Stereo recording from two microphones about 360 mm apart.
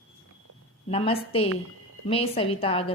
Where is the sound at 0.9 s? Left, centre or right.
Centre.